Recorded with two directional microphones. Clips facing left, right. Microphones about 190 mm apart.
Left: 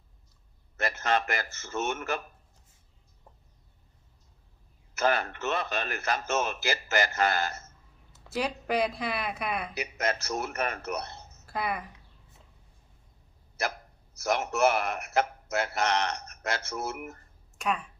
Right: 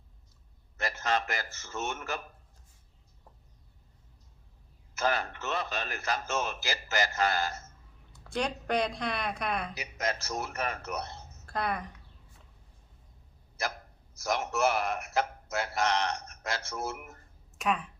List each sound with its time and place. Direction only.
0.8 s a man's voice: 60° left (ahead or behind)
4.9 s a man's voice: 60° left (ahead or behind)
8.1 s speech: 5° left (ahead or behind)
9.7 s a man's voice: 65° left (ahead or behind)
11.4 s speech: 5° left (ahead or behind)
13.6 s a man's voice: 65° left (ahead or behind)
17.6 s speech: centre (ahead or behind)